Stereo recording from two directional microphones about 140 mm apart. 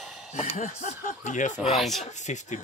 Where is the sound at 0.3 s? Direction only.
60° left (ahead or behind).